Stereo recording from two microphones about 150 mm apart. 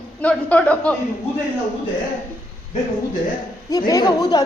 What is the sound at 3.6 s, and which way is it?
Speech, 25° left (ahead or behind).